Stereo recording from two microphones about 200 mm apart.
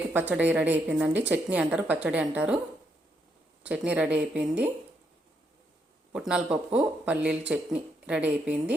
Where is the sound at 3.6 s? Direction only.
5° right (ahead or behind).